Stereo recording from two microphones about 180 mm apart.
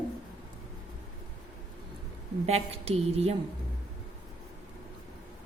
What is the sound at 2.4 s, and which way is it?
Speech, 35° right (ahead or behind).